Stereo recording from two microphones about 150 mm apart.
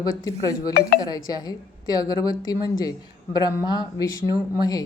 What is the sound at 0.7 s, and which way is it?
Speech, 90° left.